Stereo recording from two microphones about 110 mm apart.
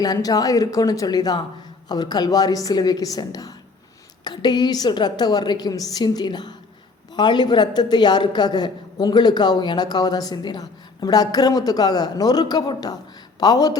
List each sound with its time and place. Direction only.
0.0 s speech: 35° left (ahead or behind)